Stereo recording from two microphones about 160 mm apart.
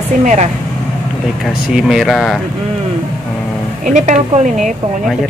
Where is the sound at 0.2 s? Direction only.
50° right (ahead or behind).